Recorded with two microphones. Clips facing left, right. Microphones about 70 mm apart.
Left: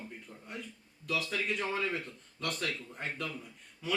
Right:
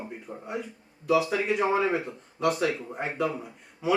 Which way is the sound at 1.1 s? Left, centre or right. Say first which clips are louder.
Right 10 dB; centre.